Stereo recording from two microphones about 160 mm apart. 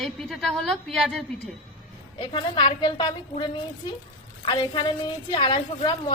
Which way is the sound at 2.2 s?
30° left (ahead or behind).